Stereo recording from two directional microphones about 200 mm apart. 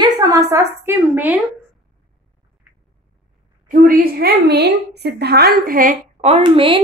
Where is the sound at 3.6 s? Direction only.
45° right (ahead or behind).